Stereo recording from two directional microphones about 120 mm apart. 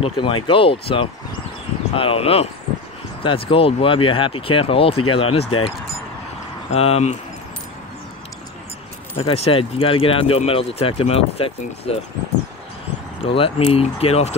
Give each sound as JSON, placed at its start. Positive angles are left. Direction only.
{"t": 0.0, "sound": "speech", "side_deg": 45}
{"t": 6.7, "sound": "speech", "side_deg": 55}
{"t": 9.2, "sound": "speech", "side_deg": 50}
{"t": 13.2, "sound": "speech", "side_deg": 50}